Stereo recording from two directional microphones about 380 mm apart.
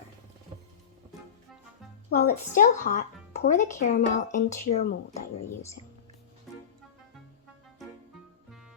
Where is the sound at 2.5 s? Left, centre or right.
Centre.